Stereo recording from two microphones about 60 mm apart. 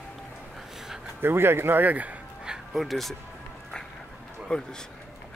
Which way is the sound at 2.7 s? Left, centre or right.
Centre.